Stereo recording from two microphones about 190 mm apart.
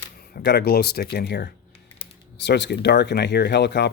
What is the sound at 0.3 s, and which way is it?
Speech, 55° left (ahead or behind).